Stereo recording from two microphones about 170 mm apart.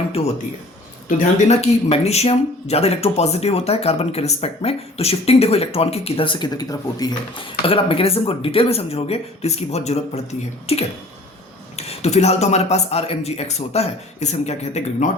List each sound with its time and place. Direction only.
1.0 s speech: 40° left (ahead or behind)